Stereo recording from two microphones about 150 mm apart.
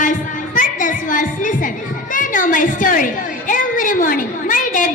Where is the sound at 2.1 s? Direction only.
65° left (ahead or behind).